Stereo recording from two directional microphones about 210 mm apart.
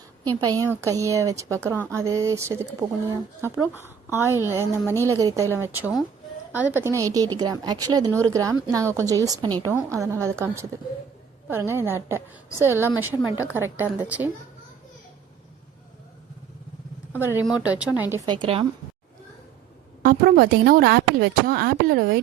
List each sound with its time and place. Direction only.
0.3 s a woman's voice: 15° right (ahead or behind)
17.1 s a woman's voice: 10° right (ahead or behind)
18.3 s a woman's voice: 25° right (ahead or behind)
20.0 s a woman's voice: 45° right (ahead or behind)